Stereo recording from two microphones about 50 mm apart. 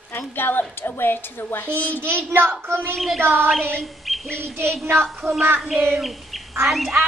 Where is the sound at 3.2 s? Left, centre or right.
Right.